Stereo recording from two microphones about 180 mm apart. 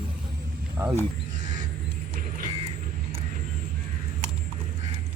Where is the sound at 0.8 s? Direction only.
15° right (ahead or behind).